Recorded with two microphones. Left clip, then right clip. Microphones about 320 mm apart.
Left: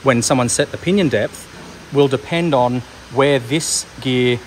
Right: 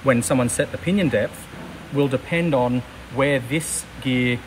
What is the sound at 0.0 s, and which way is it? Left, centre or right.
Speech, left.